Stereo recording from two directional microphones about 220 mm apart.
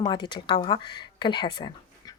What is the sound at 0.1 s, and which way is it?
Speech, 20° left (ahead or behind).